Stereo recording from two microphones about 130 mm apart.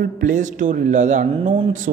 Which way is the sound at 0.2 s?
75° right (ahead or behind).